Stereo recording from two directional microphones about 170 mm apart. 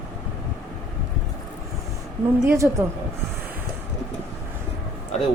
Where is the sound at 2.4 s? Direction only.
15° right (ahead or behind).